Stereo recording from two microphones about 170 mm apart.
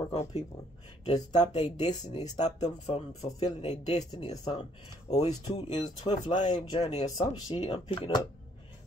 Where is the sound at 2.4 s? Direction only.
40° left (ahead or behind).